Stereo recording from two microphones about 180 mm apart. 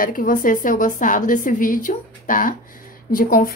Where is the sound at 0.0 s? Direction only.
50° left (ahead or behind).